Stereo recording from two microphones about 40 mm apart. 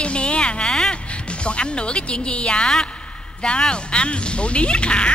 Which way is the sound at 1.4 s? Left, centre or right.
Left.